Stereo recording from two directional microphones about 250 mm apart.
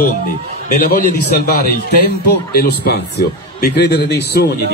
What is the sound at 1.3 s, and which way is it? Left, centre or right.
A man's voice, left.